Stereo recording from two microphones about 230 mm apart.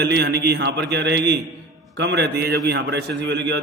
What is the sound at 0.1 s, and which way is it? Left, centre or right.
A man's voice, right.